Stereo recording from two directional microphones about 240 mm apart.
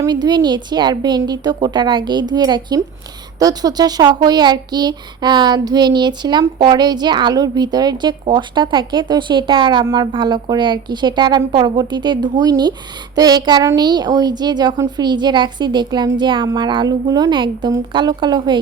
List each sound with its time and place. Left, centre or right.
0.0 s speech: centre